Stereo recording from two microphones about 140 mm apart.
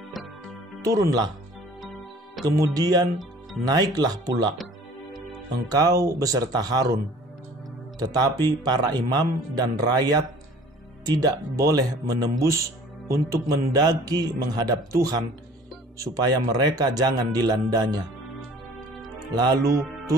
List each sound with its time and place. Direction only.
0.8 s a man's voice: 25° right (ahead or behind)
2.4 s a man's voice: 25° right (ahead or behind)
5.7 s a man's voice: 25° right (ahead or behind)
8.0 s a man's voice: 30° right (ahead or behind)
16.0 s a man's voice: 30° right (ahead or behind)
19.1 s speech: 30° right (ahead or behind)